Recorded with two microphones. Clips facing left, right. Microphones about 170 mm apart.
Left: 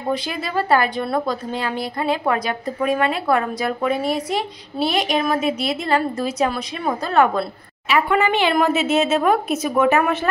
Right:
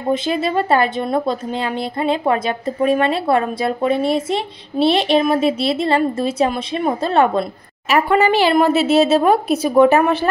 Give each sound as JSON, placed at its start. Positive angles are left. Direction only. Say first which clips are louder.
{"t": 0.1, "sound": "a woman's voice", "louder": "right 6 dB", "side_deg": -25}
{"t": 7.9, "sound": "speech", "louder": "right 4 dB", "side_deg": -35}